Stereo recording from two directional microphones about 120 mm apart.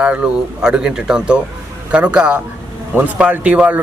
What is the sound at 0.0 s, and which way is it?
A man's voice, 10° right (ahead or behind).